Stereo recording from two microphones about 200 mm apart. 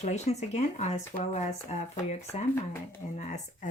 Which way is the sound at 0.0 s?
35° left (ahead or behind).